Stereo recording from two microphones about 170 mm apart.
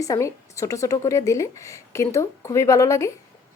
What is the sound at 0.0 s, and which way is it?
A woman's voice, 20° left (ahead or behind).